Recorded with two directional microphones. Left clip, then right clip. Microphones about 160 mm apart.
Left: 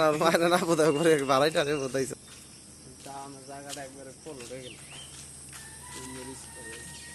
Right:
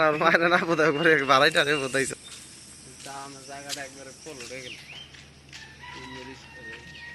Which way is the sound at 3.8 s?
15° left (ahead or behind).